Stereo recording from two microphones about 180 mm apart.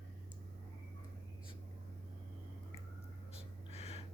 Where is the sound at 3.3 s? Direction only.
35° left (ahead or behind).